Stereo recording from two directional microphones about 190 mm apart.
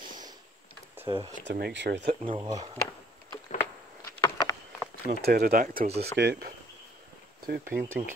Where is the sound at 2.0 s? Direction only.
25° right (ahead or behind).